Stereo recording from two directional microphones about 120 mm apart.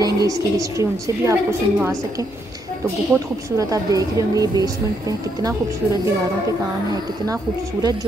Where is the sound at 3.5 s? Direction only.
30° right (ahead or behind).